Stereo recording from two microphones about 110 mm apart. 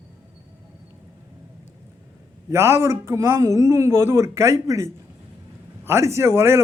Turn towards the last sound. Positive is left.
turn(degrees=-25)  # may be behind; listen again after turning